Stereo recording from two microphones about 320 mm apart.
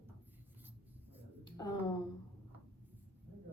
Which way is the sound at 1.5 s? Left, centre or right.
Centre.